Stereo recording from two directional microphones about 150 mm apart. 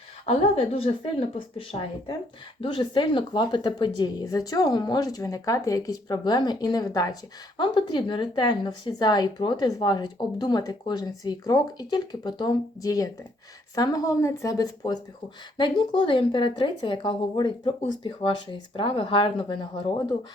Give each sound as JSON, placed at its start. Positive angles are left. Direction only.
{"t": 0.3, "sound": "a woman's voice", "side_deg": 40}